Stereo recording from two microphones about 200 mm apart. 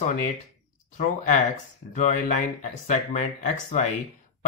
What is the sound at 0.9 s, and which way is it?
Speech, 40° left (ahead or behind).